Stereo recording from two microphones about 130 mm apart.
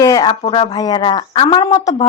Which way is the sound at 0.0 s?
30° left (ahead or behind).